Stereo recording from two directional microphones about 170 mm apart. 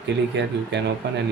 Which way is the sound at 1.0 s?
80° right.